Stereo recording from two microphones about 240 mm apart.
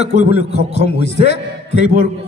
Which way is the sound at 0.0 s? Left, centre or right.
Left.